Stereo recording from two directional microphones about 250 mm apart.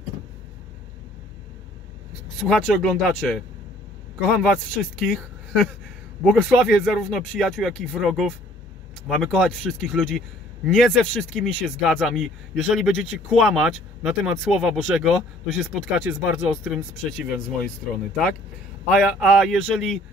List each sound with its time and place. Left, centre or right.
2.4 s speech: centre
18.9 s speech: centre